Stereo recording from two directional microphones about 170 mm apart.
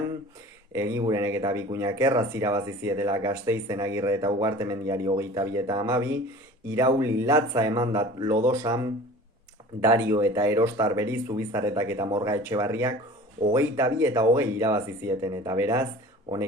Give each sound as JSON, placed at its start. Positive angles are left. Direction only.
{"t": 0.7, "sound": "speech", "side_deg": -15}